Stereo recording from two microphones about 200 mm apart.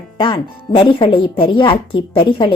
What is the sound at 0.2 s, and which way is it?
Speech, 25° left (ahead or behind).